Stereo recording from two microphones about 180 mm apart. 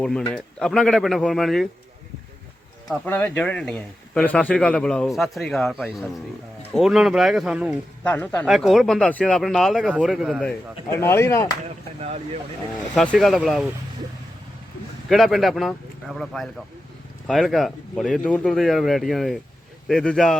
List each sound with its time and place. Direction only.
0.0 s speech: 5° left (ahead or behind)
2.9 s speech: 10° left (ahead or behind)
8.0 s speech: 10° left (ahead or behind)
10.8 s speech: 15° left (ahead or behind)
11.9 s speech: 35° right (ahead or behind)
12.9 s speech: 5° left (ahead or behind)
15.1 s speech: centre (ahead or behind)